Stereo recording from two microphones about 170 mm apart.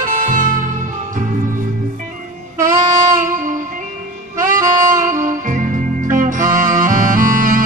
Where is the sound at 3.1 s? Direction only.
50° right (ahead or behind).